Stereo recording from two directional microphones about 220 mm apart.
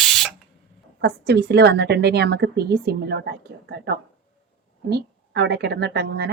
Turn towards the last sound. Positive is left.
turn(degrees=-50)  # may be behind; listen again after turning